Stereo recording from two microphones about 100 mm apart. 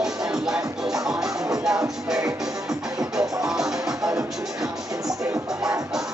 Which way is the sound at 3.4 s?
5° right (ahead or behind).